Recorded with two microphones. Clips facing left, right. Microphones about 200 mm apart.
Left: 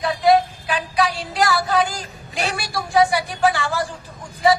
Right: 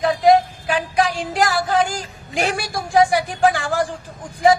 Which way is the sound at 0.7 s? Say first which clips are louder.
Right 2 dB; 45° right (ahead or behind).